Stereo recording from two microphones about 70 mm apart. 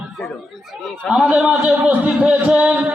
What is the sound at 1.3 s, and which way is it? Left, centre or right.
A man's voice, centre.